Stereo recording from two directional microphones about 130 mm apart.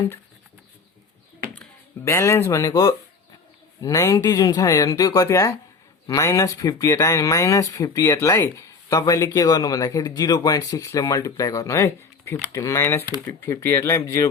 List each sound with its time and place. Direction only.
2.0 s speech: 20° left (ahead or behind)